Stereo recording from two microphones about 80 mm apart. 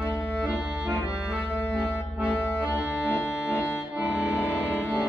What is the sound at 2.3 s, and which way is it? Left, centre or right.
Accordion, left.